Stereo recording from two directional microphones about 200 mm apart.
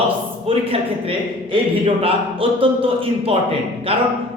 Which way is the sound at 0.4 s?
30° right (ahead or behind).